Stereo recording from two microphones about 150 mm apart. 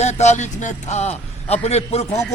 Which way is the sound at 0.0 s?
50° left (ahead or behind).